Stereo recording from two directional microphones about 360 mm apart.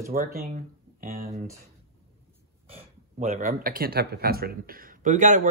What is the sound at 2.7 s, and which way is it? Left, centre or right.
Speech, centre.